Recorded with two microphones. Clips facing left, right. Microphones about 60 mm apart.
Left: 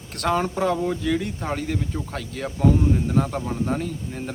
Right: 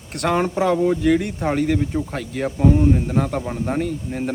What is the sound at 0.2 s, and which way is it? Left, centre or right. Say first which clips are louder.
Speech: right 3 dB; right.